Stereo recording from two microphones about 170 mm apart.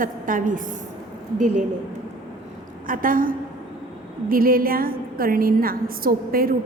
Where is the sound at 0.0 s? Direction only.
50° right (ahead or behind).